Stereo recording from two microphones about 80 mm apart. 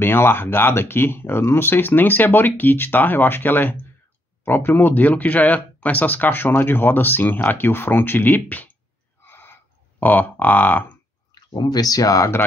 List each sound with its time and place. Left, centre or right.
0.0 s speech: left
9.2 s a sound: left
11.5 s speech: left